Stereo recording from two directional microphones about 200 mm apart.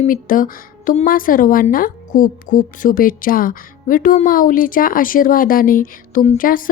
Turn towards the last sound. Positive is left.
turn(degrees=45)  # may be behind; listen again after turning